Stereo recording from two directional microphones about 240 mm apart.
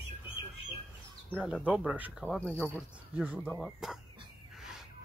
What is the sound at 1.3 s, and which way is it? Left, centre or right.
Speech, centre.